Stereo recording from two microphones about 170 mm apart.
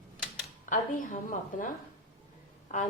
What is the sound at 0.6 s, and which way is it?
A woman's voice, 50° left (ahead or behind).